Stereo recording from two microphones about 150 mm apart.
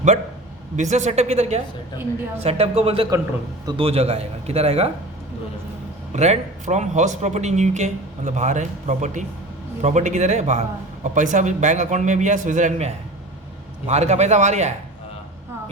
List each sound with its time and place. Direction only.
0.8 s a man's voice: 50° right (ahead or behind)
6.1 s a man's voice: 50° right (ahead or behind)